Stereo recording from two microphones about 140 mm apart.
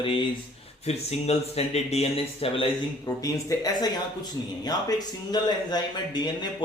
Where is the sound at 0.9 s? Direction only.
50° left (ahead or behind).